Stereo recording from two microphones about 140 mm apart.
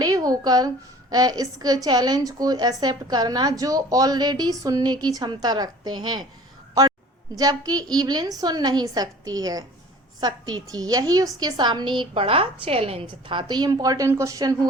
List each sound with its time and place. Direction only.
0.0 s a woman's voice: 25° right (ahead or behind)
7.3 s a woman's voice: 25° right (ahead or behind)